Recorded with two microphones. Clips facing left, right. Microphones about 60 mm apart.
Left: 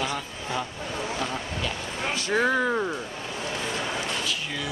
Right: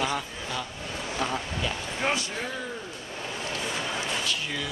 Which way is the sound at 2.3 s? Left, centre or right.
Left.